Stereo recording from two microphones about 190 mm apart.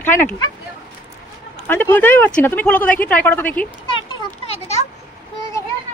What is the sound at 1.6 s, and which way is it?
A woman's voice, 10° left (ahead or behind).